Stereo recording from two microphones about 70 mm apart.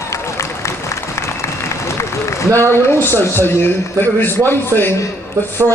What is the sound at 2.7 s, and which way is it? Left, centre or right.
A man's voice, left.